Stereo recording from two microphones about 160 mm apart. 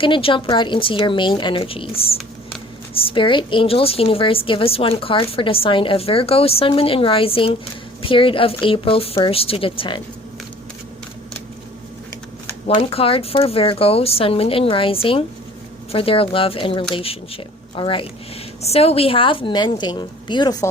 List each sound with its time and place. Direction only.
0.0 s a woman's voice: 35° left (ahead or behind)
12.6 s a woman's voice: 35° left (ahead or behind)